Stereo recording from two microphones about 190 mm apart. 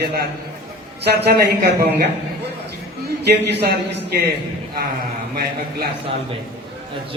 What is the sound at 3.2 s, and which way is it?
Speech, 60° right (ahead or behind).